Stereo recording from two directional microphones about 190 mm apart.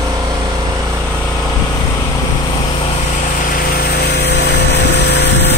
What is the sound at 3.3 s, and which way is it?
Vehicle, 45° left (ahead or behind).